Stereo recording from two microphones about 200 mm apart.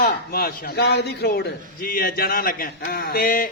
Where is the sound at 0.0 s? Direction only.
50° left (ahead or behind).